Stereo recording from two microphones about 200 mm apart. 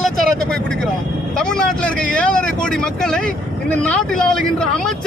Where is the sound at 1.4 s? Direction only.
5° left (ahead or behind).